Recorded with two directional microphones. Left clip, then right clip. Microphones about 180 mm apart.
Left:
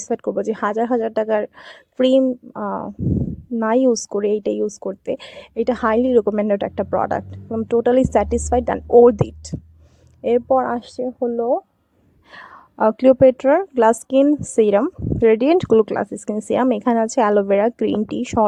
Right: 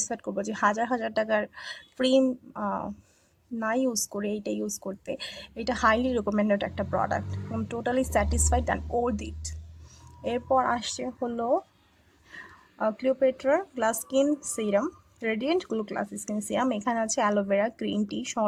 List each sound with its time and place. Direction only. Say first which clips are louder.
0.0 s a woman's voice: left 10 dB; 45° left (ahead or behind)
10.2 s speech: left 8 dB; 40° left (ahead or behind)
12.3 s a woman's voice: left 6 dB; 55° left (ahead or behind)